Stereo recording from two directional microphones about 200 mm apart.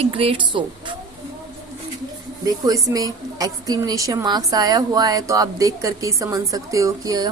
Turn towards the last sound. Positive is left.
turn(degrees=-15)  # may be behind; listen again after turning